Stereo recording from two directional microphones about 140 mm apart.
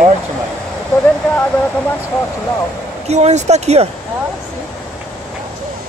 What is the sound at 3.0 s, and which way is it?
Speech, 50° right (ahead or behind).